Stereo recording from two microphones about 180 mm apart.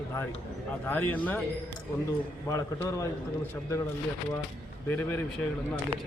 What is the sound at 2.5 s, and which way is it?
Speech, 20° left (ahead or behind).